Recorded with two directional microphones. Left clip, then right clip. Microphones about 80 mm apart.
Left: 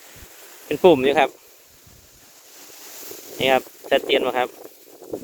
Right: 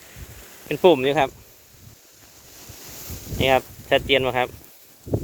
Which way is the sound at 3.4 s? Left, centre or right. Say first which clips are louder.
Even; centre.